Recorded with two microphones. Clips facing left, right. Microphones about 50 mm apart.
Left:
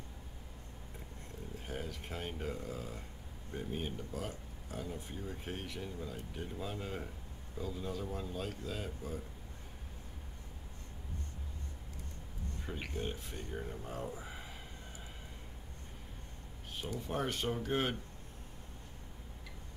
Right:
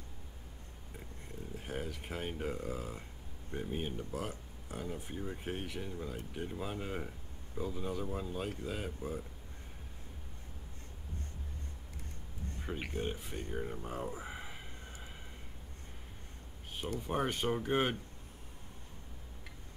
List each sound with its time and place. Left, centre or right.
1.6 s speech: centre
12.6 s speech: centre
17.1 s speech: centre